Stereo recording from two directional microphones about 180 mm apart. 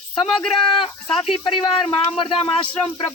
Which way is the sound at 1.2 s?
30° left (ahead or behind).